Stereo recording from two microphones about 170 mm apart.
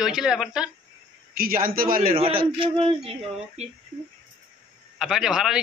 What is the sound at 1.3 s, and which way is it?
Speech, 60° right (ahead or behind).